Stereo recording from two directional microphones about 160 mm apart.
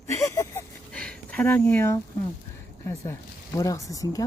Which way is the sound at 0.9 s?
5° left (ahead or behind).